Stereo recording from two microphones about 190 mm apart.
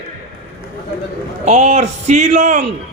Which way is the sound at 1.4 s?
35° right (ahead or behind).